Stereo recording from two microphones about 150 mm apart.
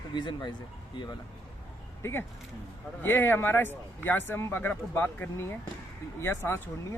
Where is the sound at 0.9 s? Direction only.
30° left (ahead or behind).